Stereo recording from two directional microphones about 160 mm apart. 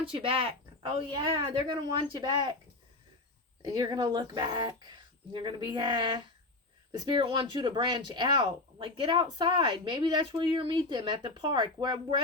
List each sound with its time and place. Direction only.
0.0 s speech: 35° right (ahead or behind)
3.6 s speech: 25° right (ahead or behind)